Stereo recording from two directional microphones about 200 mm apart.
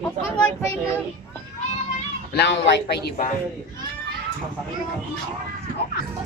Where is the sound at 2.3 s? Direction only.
55° left (ahead or behind).